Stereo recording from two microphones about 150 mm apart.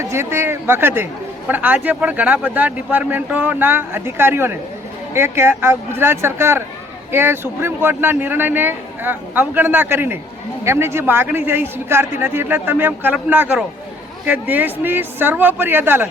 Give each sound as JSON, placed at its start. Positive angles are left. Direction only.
{"t": 0.0, "sound": "a man's voice", "side_deg": -20}
{"t": 14.5, "sound": "a man's voice", "side_deg": -15}